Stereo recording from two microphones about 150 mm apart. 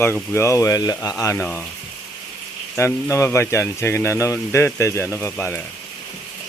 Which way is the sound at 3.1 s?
20° left (ahead or behind).